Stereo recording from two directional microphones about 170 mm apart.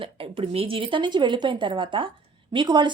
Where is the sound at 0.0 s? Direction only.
30° right (ahead or behind).